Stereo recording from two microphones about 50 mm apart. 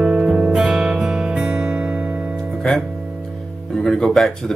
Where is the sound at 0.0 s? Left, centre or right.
Centre.